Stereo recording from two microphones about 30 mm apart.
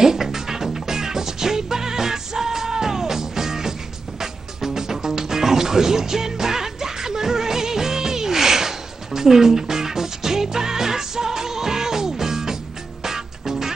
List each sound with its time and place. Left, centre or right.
0.0 s music: centre